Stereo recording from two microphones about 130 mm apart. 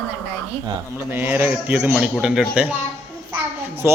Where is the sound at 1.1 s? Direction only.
15° right (ahead or behind).